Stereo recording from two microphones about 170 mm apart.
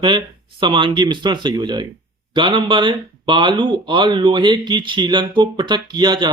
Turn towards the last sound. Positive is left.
turn(degrees=-25)  # may be behind; listen again after turning